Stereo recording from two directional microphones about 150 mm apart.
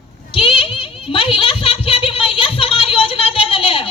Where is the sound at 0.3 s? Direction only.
35° left (ahead or behind).